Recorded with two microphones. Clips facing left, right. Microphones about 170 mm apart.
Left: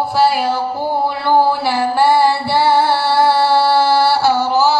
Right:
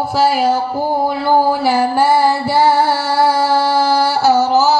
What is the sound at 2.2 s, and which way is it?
Music, 45° right (ahead or behind).